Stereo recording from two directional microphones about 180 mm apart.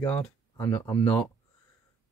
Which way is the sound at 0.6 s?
15° left (ahead or behind).